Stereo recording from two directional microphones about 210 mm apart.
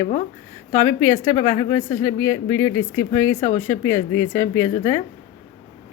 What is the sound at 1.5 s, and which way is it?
Speech, 15° left (ahead or behind).